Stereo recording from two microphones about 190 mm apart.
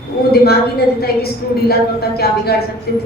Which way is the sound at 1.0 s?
55° left (ahead or behind).